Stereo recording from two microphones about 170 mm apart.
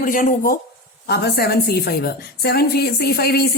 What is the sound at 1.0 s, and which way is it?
A woman's voice, 75° left (ahead or behind).